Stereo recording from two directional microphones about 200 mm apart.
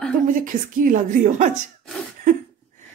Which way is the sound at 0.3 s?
40° right (ahead or behind).